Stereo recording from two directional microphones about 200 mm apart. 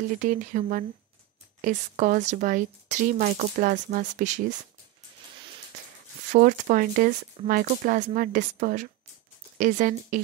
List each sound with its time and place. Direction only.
0.1 s speech: 40° right (ahead or behind)
6.2 s speech: 40° right (ahead or behind)